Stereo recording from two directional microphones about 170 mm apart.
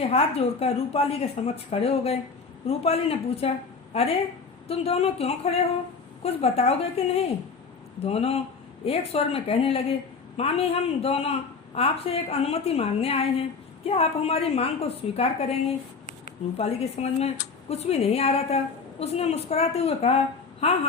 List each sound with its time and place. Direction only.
0.0 s a woman's voice: 35° left (ahead or behind)
8.0 s a woman's voice: 35° left (ahead or behind)
16.6 s a woman's voice: 35° left (ahead or behind)